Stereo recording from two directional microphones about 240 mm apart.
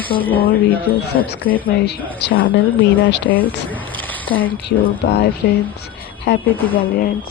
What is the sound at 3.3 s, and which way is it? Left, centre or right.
Speech, centre.